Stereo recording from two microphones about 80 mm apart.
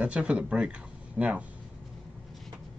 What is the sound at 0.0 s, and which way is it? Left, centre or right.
Speech, centre.